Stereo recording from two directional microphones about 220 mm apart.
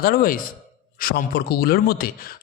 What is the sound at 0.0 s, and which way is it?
A man's voice, 45° left (ahead or behind).